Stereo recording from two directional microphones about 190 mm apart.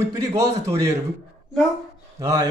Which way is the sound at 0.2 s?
15° right (ahead or behind).